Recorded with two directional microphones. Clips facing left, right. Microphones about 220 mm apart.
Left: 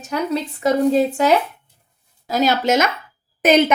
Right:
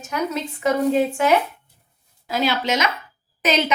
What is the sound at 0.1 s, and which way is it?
A woman's voice, 35° left (ahead or behind).